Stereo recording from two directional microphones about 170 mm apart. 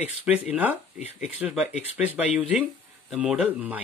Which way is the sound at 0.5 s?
10° right (ahead or behind).